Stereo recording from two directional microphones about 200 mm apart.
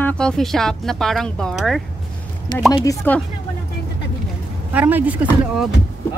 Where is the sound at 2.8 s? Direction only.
15° left (ahead or behind).